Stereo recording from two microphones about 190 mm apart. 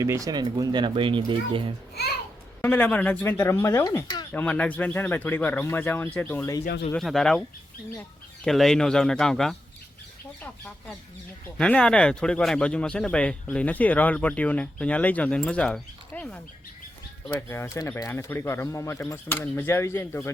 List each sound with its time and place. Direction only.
0.0 s speech: 15° right (ahead or behind)
2.6 s speech: 10° left (ahead or behind)
4.4 s speech: 5° left (ahead or behind)
6.9 s speech: centre (ahead or behind)
8.4 s speech: centre (ahead or behind)
11.5 s speech: 5° left (ahead or behind)